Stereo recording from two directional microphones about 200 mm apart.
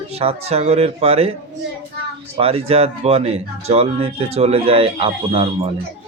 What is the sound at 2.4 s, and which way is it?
Speech, 30° right (ahead or behind).